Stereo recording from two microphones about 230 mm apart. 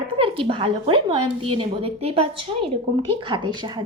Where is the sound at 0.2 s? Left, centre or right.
Right.